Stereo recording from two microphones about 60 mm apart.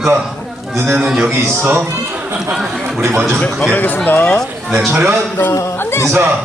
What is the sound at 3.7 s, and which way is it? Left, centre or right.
Speech, left.